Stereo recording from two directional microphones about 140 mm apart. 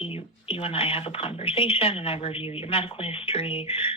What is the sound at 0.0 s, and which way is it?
Speech, 40° left (ahead or behind).